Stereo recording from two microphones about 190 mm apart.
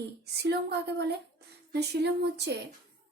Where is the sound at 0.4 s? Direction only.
60° right (ahead or behind).